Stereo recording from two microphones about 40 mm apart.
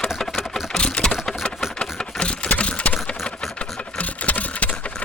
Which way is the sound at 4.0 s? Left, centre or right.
Left.